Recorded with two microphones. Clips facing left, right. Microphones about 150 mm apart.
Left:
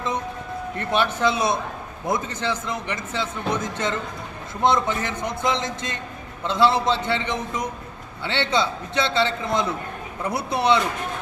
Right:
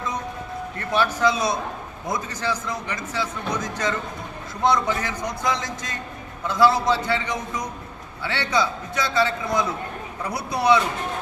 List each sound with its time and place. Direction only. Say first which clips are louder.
0.8 s a man's voice: even; 25° left (ahead or behind)